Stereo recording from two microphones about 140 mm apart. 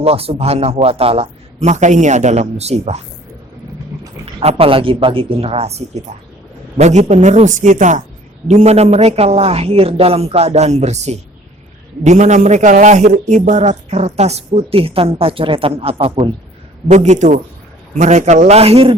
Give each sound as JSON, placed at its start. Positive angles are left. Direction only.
{"t": 0.0, "sound": "a man's voice", "side_deg": -45}
{"t": 4.4, "sound": "a woman's voice", "side_deg": -40}
{"t": 8.4, "sound": "a man's voice", "side_deg": -50}
{"t": 16.9, "sound": "a woman's voice", "side_deg": -55}